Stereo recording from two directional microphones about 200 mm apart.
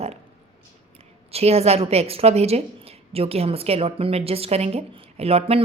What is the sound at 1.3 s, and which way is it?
A woman's voice, 30° right (ahead or behind).